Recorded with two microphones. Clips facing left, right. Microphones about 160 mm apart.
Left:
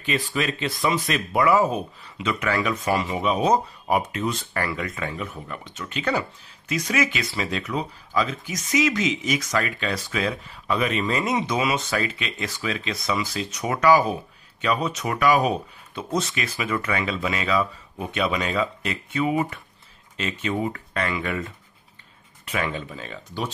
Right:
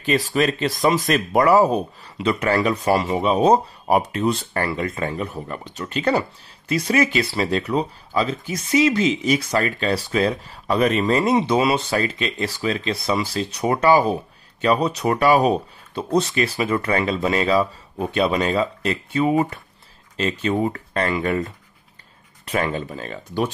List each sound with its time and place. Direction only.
0.0 s speech: 40° right (ahead or behind)